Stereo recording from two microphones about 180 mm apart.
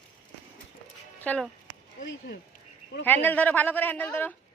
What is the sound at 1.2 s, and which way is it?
Speech, 10° left (ahead or behind).